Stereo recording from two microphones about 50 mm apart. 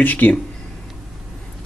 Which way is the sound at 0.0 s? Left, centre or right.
Left.